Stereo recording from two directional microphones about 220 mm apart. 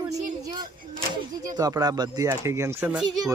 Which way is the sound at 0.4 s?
20° right (ahead or behind).